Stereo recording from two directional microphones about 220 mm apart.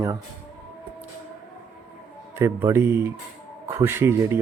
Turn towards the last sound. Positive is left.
turn(degrees=-10)  # may be behind; listen again after turning